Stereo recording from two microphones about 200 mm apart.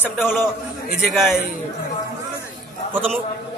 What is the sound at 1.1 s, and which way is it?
Speech, centre (ahead or behind).